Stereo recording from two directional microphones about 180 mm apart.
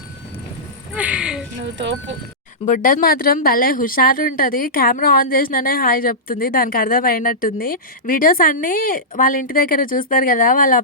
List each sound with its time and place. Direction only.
0.9 s a sound: 5° right (ahead or behind)
1.6 s speech: 90° right
2.6 s speech: 50° left (ahead or behind)